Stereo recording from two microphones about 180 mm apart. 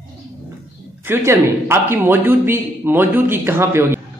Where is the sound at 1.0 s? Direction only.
15° right (ahead or behind).